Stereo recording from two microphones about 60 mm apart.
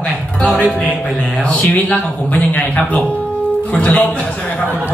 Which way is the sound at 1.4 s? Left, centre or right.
Centre.